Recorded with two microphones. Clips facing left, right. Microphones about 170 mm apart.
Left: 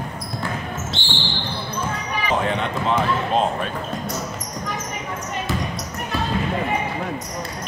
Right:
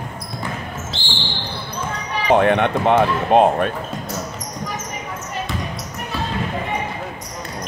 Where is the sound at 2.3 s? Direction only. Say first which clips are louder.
Right 8 dB; 65° right (ahead or behind).